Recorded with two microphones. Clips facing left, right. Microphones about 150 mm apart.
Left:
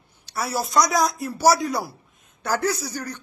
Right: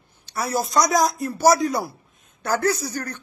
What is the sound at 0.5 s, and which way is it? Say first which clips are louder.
Speech: right 1 dB; centre (ahead or behind).